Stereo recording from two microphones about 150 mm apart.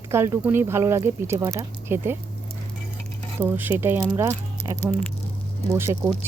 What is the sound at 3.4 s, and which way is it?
Speech, 15° right (ahead or behind).